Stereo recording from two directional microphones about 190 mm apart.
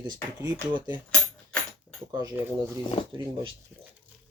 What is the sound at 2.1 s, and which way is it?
Speech, 20° right (ahead or behind).